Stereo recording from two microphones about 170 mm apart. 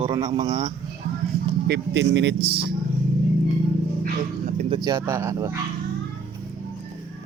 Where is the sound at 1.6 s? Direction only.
80° right.